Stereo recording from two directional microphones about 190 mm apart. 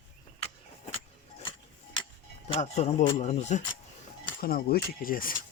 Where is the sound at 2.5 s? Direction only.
35° left (ahead or behind).